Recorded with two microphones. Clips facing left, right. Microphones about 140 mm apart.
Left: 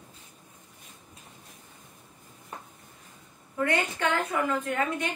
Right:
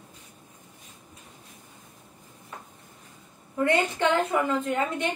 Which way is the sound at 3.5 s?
25° right (ahead or behind).